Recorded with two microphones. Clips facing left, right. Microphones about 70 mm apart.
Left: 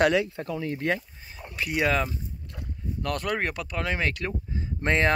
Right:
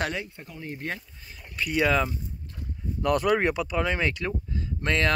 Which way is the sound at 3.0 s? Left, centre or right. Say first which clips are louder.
Right 6 dB; centre.